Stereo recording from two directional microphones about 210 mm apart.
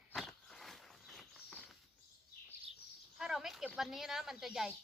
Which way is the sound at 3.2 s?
Centre (ahead or behind).